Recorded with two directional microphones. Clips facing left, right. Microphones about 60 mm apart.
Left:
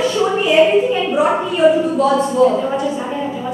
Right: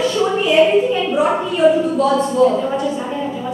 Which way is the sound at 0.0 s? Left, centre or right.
Centre.